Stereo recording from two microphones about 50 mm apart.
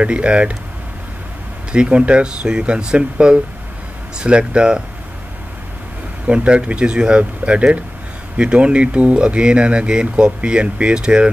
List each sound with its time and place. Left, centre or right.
0.0 s speech: right
1.7 s speech: right
6.2 s speech: right